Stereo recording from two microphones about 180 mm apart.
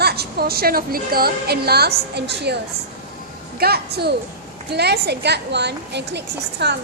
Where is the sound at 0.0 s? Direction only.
60° right (ahead or behind).